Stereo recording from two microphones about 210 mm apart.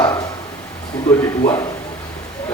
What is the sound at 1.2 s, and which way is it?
Speech, 10° left (ahead or behind).